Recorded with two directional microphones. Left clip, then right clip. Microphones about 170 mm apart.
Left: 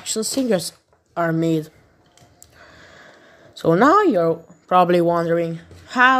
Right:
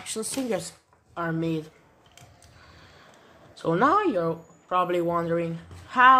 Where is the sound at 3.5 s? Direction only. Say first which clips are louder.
Left 7 dB; 45° left (ahead or behind).